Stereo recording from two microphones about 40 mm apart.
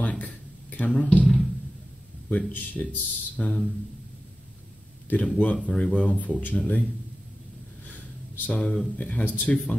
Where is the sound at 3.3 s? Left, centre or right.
Left.